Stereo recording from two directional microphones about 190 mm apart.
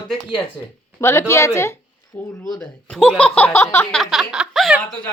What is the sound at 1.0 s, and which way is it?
Speech, 15° left (ahead or behind).